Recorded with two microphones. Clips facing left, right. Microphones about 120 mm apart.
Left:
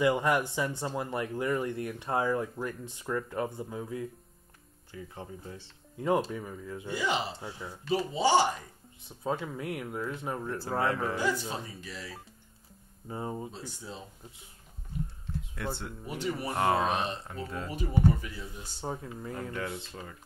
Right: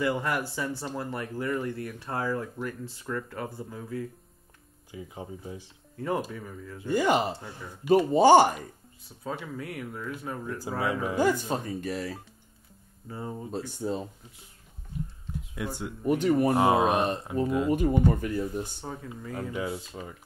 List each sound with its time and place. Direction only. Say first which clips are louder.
0.0 s speech: left 2 dB; 20° left (ahead or behind)
4.9 s speech: right 3 dB; 10° right (ahead or behind)
5.9 s speech: left 2 dB; 15° left (ahead or behind)
6.9 s speech: right 7 dB; 50° right (ahead or behind)
9.2 s speech: left 2 dB; 20° left (ahead or behind)
10.8 s speech: right 1 dB; 15° right (ahead or behind)
11.1 s speech: right 6 dB; 50° right (ahead or behind)
13.1 s speech: left 1 dB; 15° left (ahead or behind)
13.5 s speech: right 11 dB; 55° right (ahead or behind)
15.5 s speech: right 3 dB; 10° right (ahead or behind)
16.1 s speech: right 11 dB; 50° right (ahead or behind)
16.5 s speech: right 5 dB; 15° right (ahead or behind)
17.9 s speech: right 3 dB; 50° right (ahead or behind)
19.3 s speech: right 5 dB; 10° right (ahead or behind)